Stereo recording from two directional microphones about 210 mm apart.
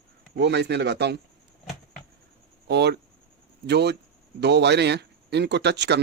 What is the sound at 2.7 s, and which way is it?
Speech, 50° right (ahead or behind).